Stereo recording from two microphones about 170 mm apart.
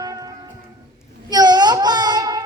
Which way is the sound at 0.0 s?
20° right (ahead or behind).